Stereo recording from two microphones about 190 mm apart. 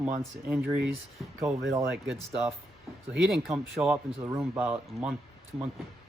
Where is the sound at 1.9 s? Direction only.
Centre (ahead or behind).